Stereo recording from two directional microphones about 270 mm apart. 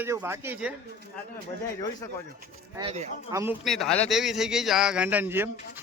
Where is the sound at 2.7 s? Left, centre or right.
Right.